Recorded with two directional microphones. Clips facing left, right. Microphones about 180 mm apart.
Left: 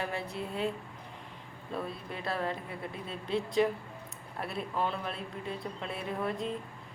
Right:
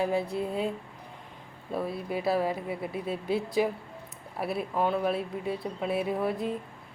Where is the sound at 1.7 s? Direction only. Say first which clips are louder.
Right 7 dB; 10° right (ahead or behind).